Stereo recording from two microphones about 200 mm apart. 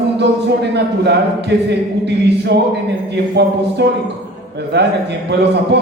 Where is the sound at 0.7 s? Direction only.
55° right (ahead or behind).